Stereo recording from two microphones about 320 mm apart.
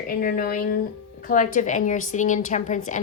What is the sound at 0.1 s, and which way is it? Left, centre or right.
A woman's voice, left.